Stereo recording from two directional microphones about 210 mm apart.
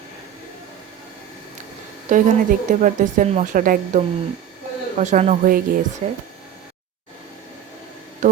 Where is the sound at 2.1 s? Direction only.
35° right (ahead or behind).